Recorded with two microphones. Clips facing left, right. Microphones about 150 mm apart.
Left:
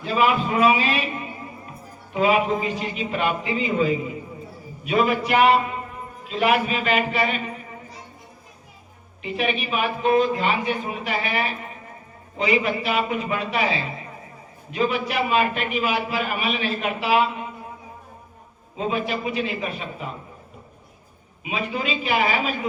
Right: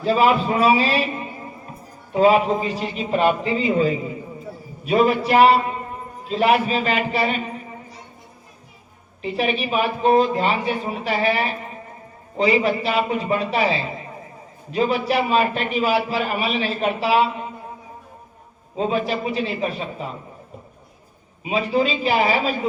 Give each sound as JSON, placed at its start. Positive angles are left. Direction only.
{"t": 0.0, "sound": "a man's voice", "side_deg": -35}
{"t": 9.2, "sound": "a man's voice", "side_deg": -35}
{"t": 18.8, "sound": "a man's voice", "side_deg": -35}
{"t": 21.5, "sound": "a man's voice", "side_deg": -35}